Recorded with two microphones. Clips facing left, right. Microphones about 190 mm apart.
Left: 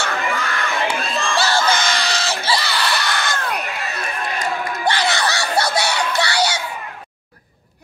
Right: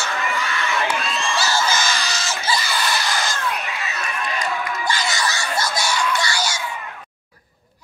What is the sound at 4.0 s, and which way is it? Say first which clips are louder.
Run: even; 35° left (ahead or behind).